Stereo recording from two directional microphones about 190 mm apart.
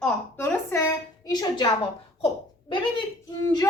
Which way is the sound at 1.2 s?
20° left (ahead or behind).